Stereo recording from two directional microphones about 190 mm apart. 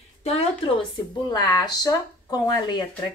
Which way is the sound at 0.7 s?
20° left (ahead or behind).